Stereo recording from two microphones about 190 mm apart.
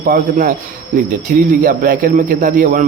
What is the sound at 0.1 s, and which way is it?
A man's voice, 45° right (ahead or behind).